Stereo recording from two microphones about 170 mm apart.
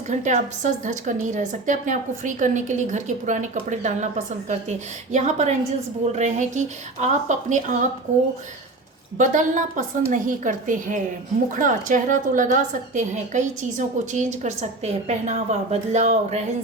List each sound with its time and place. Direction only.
0.1 s a woman's voice: 45° right (ahead or behind)
9.1 s a woman's voice: 50° right (ahead or behind)